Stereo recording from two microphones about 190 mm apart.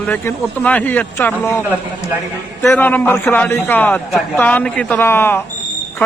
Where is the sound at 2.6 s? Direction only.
10° left (ahead or behind).